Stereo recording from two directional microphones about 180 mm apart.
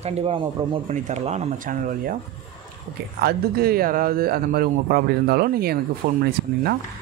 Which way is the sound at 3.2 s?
60° right (ahead or behind).